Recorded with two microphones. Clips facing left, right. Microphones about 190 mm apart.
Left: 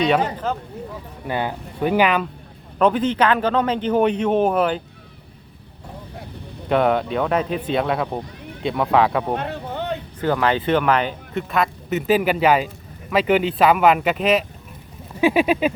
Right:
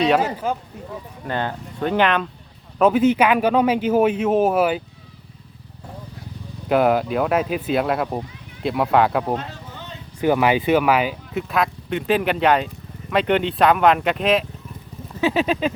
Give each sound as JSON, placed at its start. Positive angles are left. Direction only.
{"t": 0.0, "sound": "a man's voice", "side_deg": -5}
{"t": 1.3, "sound": "speech", "side_deg": 10}
{"t": 2.7, "sound": "a man's voice", "side_deg": -5}
{"t": 6.7, "sound": "speech", "side_deg": -5}
{"t": 9.3, "sound": "a sound", "side_deg": 60}
{"t": 10.2, "sound": "speech", "side_deg": -15}
{"t": 15.2, "sound": "speech", "side_deg": 10}